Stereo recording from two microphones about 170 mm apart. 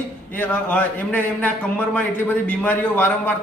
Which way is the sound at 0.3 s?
10° left (ahead or behind).